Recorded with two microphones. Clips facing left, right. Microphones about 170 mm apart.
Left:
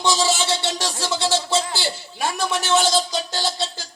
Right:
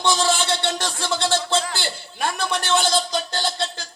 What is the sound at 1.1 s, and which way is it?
Music, 55° right (ahead or behind).